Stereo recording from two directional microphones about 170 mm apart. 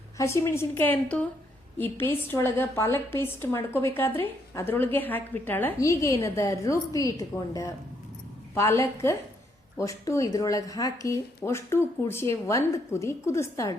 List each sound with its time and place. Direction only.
0.2 s speech: 15° left (ahead or behind)